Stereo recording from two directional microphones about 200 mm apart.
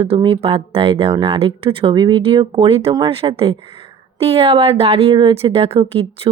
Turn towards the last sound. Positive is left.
turn(degrees=-30)  # may be behind; listen again after turning